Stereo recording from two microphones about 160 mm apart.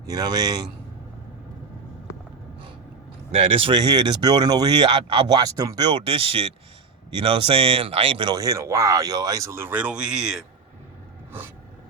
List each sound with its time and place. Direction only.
0.0 s speech: 25° right (ahead or behind)
3.3 s speech: 35° right (ahead or behind); by 10.4 s 5° right (ahead or behind)